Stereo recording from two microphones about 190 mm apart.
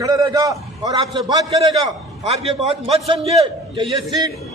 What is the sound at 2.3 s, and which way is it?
A man's voice, 35° right (ahead or behind).